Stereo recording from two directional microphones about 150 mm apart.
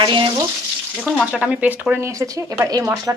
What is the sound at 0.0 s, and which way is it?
Frying, 30° right (ahead or behind).